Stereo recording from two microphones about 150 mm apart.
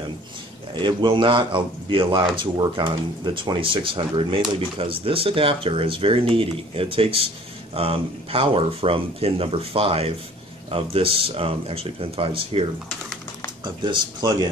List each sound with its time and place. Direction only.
0.7 s speech: 30° right (ahead or behind)
13.8 s speech: 30° right (ahead or behind)